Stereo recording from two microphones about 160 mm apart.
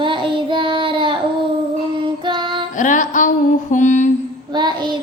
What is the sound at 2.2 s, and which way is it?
Music, 30° right (ahead or behind).